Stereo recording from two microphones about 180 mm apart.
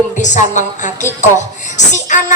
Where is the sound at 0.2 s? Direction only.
45° left (ahead or behind).